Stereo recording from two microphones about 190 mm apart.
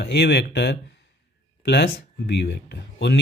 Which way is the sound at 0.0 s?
60° left (ahead or behind).